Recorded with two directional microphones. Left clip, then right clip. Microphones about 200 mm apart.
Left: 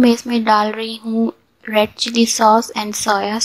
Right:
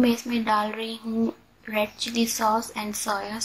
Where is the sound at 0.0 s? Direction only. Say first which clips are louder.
Left 9 dB; 35° left (ahead or behind).